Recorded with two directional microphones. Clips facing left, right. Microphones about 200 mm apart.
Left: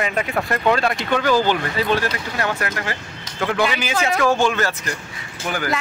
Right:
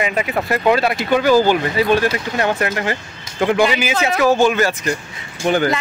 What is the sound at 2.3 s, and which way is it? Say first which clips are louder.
A man's voice: right 5 dB; 20° right (ahead or behind).